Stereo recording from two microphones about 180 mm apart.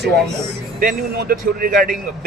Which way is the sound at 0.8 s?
55° right (ahead or behind).